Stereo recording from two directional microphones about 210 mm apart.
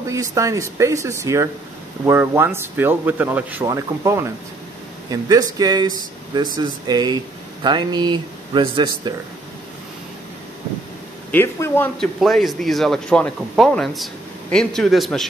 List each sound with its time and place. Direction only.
0.0 s speech: 15° right (ahead or behind)
11.3 s speech: 10° left (ahead or behind)